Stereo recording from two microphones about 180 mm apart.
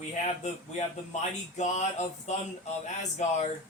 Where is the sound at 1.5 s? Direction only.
40° left (ahead or behind).